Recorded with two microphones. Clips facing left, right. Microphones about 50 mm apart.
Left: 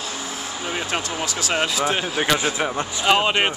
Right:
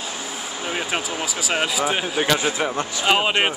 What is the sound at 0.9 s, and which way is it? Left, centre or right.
Speech, centre.